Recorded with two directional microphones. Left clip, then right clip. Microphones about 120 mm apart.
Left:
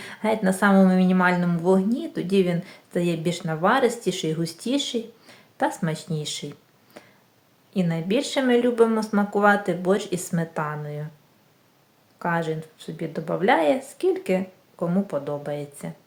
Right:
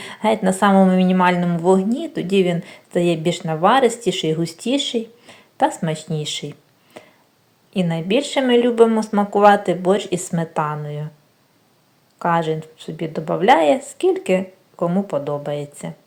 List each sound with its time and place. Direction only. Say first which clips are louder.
0.0 s speech: right 5 dB; 25° right (ahead or behind)
7.0 s a sound: right 6 dB; 25° right (ahead or behind)
7.7 s speech: right 5 dB; 25° right (ahead or behind)
12.2 s speech: right 7 dB; 25° right (ahead or behind)